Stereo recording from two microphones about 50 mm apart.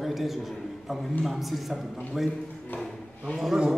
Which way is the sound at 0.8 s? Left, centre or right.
Centre.